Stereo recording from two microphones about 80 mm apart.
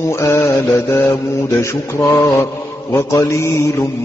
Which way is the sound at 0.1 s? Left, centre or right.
Left.